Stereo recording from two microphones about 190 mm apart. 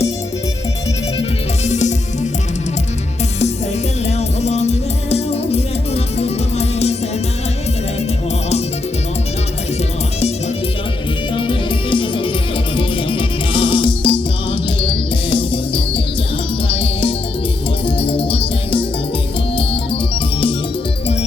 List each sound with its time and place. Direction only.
1.6 s music: 40° left (ahead or behind)
4.0 s music: 35° left (ahead or behind)
11.3 s music: 25° left (ahead or behind)
19.5 s organ: 30° left (ahead or behind)